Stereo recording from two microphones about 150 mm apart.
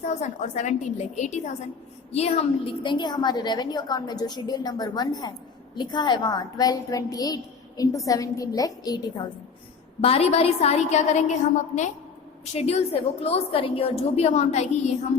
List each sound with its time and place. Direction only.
0.0 s a woman's voice: 50° left (ahead or behind); by 9.0 s 25° left (ahead or behind)
10.0 s a woman's voice: 40° left (ahead or behind)